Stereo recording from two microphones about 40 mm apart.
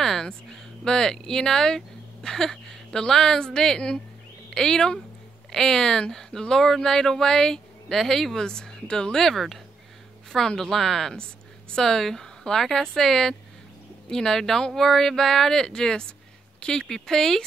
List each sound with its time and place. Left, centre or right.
0.0 s a sound: centre
0.5 s speech: centre
9.3 s speech: centre